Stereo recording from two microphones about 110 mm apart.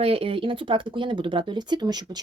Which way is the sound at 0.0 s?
60° right (ahead or behind).